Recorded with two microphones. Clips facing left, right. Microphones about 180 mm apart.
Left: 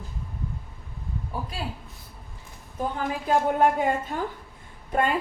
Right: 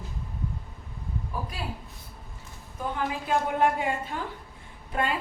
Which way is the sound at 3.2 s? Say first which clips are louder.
Left 4 dB; 45° left (ahead or behind).